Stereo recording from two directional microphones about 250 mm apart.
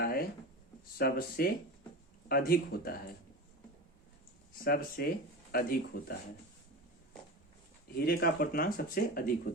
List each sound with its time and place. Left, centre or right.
0.0 s writing: left
0.9 s speech: left
4.6 s speech: left
8.0 s speech: left